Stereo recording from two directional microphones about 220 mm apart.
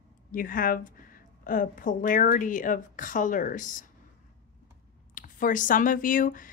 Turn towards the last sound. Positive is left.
turn(degrees=40)  # may be behind; listen again after turning